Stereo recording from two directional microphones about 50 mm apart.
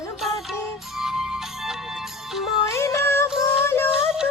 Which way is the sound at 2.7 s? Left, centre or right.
Left.